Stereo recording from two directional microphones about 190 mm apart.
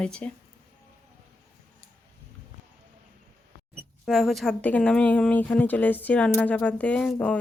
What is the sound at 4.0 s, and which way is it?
A woman's voice, centre (ahead or behind).